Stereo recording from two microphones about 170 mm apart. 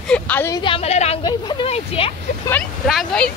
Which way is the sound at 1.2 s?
25° left (ahead or behind).